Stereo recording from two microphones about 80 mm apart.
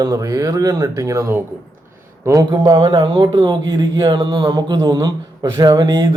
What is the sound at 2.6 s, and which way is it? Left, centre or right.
Speech, right.